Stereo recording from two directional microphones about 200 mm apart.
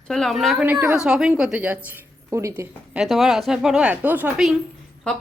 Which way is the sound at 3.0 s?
Centre (ahead or behind).